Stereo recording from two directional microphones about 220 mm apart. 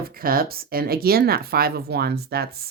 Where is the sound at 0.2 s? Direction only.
40° right (ahead or behind).